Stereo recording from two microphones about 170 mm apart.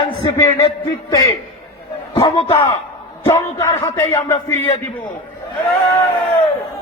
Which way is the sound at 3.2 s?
20° left (ahead or behind).